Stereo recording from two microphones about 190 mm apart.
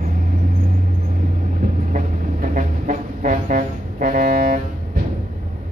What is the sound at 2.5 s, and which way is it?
Music, 45° right (ahead or behind).